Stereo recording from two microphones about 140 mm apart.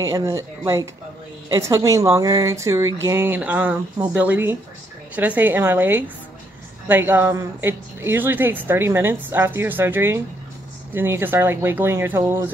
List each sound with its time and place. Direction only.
0.0 s a woman's voice: 25° right (ahead or behind)